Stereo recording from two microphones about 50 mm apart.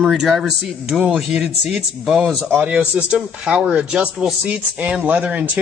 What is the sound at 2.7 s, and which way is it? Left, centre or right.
Speech, right.